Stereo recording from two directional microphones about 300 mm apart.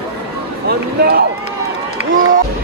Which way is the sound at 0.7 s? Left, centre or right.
Right.